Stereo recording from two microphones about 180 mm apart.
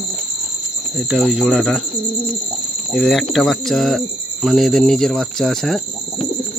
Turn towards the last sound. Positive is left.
turn(degrees=0)  # may be behind; listen again after turning